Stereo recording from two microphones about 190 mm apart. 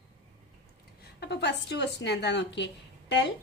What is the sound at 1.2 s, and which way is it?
A woman's voice, 65° left (ahead or behind).